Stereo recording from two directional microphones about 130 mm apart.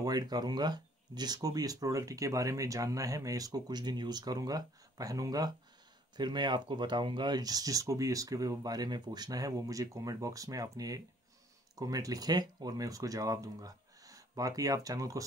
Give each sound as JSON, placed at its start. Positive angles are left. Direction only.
{"t": 0.0, "sound": "speech", "side_deg": -30}